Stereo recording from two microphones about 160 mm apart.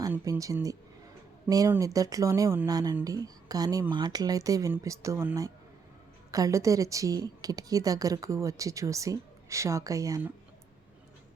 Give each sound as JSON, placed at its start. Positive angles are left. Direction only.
{"t": 0.3, "sound": "speech", "side_deg": -20}